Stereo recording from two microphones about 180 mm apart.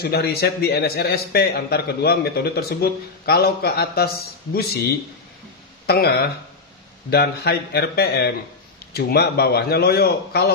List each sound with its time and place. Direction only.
0.0 s a man's voice: 60° left (ahead or behind)